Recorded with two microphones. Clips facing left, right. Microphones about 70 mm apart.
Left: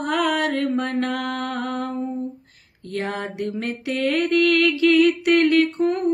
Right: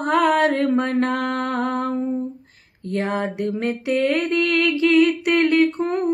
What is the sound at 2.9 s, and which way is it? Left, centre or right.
Mantra, right.